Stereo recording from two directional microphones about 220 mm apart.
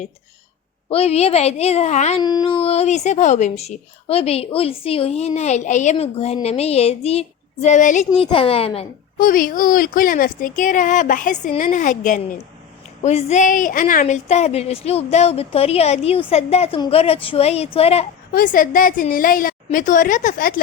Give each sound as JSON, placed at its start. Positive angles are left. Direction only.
{"t": 0.9, "sound": "speech", "side_deg": 25}
{"t": 2.2, "sound": "speech", "side_deg": 20}
{"t": 9.1, "sound": "speech", "side_deg": 40}
{"t": 18.3, "sound": "speech", "side_deg": 40}